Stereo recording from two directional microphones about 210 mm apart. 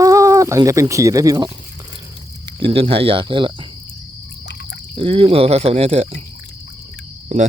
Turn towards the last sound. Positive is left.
turn(degrees=-35)  # may be behind; listen again after turning